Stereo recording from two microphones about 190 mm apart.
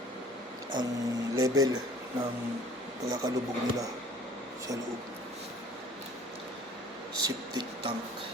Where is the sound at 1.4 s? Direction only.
20° right (ahead or behind).